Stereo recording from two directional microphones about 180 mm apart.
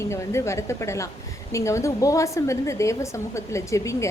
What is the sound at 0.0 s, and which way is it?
A woman's voice, 15° left (ahead or behind).